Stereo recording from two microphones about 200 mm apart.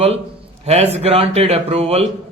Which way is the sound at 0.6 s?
30° right (ahead or behind).